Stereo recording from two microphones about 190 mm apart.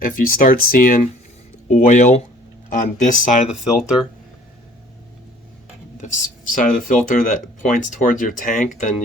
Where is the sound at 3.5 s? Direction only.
5° right (ahead or behind).